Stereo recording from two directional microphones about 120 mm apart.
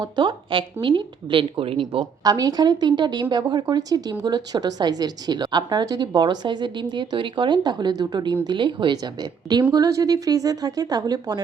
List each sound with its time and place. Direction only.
0.0 s speech: 40° right (ahead or behind)
2.2 s speech: 30° right (ahead or behind)